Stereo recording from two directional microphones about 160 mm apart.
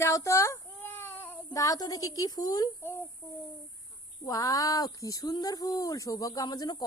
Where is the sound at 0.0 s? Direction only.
20° left (ahead or behind).